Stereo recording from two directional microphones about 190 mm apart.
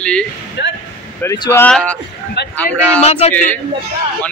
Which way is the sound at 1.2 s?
15° left (ahead or behind).